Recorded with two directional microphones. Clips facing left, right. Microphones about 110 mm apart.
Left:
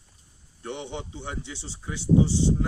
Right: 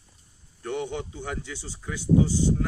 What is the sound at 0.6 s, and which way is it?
Speech, 20° left (ahead or behind).